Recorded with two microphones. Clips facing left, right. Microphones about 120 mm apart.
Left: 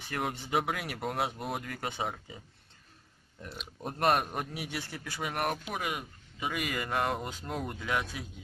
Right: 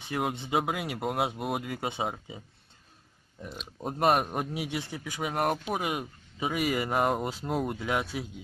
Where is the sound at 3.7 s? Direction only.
5° right (ahead or behind).